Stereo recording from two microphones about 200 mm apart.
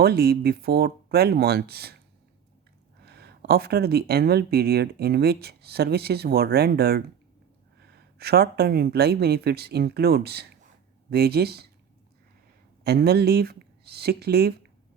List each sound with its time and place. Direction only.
0.0 s speech: 50° right (ahead or behind)
3.0 s speech: 55° right (ahead or behind)
12.8 s speech: 50° right (ahead or behind)